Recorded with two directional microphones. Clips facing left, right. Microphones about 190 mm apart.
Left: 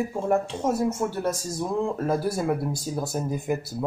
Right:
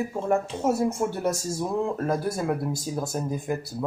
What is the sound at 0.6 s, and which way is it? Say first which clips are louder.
Speech: right 1 dB; 10° right (ahead or behind).